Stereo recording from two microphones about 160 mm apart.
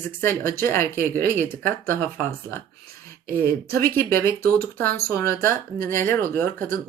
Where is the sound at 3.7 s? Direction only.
15° left (ahead or behind).